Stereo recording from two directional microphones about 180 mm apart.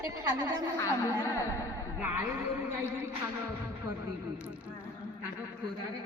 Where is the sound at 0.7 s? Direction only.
15° left (ahead or behind).